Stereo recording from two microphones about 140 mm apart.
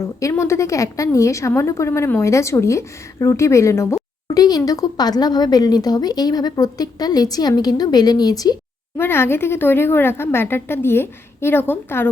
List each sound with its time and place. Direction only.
0.2 s a woman's voice: 20° left (ahead or behind)
9.0 s a woman's voice: 15° left (ahead or behind)